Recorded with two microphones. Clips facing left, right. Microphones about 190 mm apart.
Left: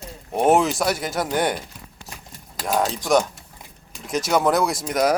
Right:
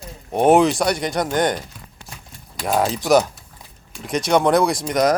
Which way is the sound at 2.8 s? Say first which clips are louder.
Right 3 dB; 5° right (ahead or behind).